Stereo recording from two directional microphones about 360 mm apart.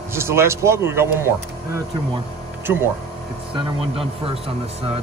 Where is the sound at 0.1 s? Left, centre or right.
Centre.